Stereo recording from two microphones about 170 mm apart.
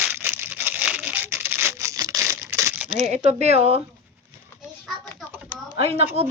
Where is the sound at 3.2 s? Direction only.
40° right (ahead or behind).